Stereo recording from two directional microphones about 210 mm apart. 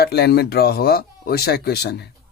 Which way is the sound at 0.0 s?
50° left (ahead or behind).